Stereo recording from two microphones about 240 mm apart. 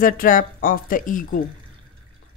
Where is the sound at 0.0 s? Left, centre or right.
Left.